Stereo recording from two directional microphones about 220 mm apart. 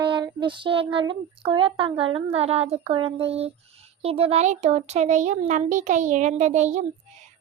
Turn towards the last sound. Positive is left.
turn(degrees=-30)  # may be behind; listen again after turning